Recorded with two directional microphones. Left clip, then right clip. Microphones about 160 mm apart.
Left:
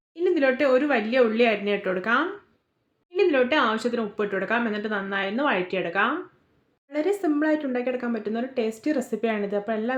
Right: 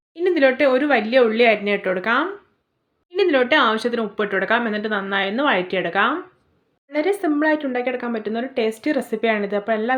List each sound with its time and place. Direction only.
0.1 s speech: 15° right (ahead or behind)